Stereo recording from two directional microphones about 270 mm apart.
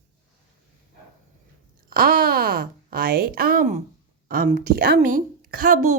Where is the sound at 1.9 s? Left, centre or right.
Right.